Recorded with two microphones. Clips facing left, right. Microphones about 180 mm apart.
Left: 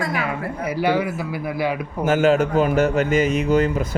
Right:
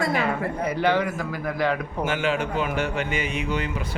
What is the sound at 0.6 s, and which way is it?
A man's voice, 10° left (ahead or behind).